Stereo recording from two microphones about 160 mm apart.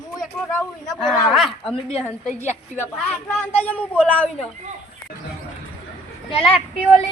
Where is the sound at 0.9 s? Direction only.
Centre (ahead or behind).